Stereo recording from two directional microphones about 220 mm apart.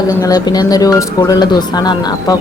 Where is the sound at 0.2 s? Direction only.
15° left (ahead or behind).